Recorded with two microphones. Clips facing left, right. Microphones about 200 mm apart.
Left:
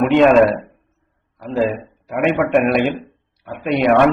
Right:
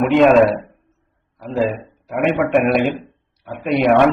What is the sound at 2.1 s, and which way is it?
A man's voice, centre (ahead or behind).